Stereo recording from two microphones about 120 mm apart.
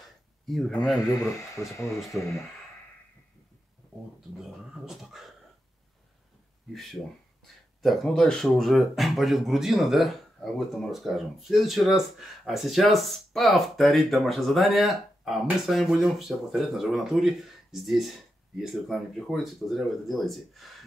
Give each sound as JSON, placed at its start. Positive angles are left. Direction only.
{"t": 0.5, "sound": "speech", "side_deg": 0}
{"t": 0.9, "sound": "speech", "side_deg": 30}
{"t": 2.0, "sound": "speech", "side_deg": 0}
{"t": 4.4, "sound": "speech", "side_deg": -5}
{"t": 6.7, "sound": "speech", "side_deg": 5}